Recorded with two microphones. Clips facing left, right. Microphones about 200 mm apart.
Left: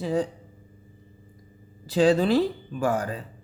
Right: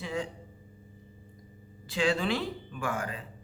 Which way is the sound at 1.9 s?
40° left (ahead or behind).